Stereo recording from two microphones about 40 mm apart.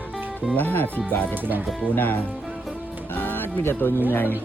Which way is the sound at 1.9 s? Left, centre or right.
Left.